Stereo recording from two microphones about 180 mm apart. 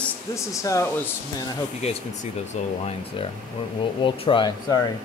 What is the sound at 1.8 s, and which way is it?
Speech, 35° left (ahead or behind).